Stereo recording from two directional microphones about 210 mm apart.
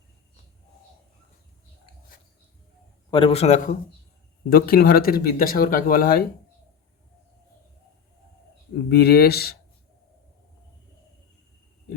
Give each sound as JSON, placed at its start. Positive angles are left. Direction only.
{"t": 3.1, "sound": "a man's voice", "side_deg": 25}
{"t": 4.4, "sound": "speech", "side_deg": 45}
{"t": 8.9, "sound": "speech", "side_deg": 50}